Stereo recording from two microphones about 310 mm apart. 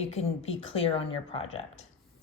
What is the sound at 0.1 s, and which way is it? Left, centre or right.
Speech, centre.